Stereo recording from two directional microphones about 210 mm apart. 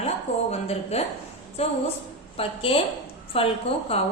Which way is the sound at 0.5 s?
30° left (ahead or behind).